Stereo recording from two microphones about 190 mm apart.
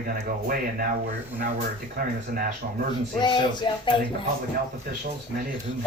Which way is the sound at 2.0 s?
50° right (ahead or behind).